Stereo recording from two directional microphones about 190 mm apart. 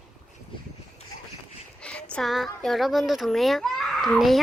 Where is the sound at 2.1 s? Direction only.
Centre (ahead or behind).